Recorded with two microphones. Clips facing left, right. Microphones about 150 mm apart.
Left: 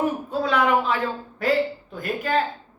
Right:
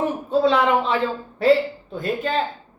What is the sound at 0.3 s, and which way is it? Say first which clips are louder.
Speech: right 6 dB; 25° right (ahead or behind).